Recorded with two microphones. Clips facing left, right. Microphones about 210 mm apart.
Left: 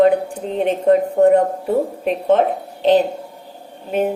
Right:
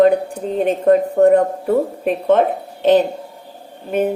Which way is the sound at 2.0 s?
55° right (ahead or behind).